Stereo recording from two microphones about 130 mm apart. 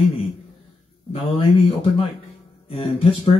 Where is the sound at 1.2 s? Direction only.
45° left (ahead or behind).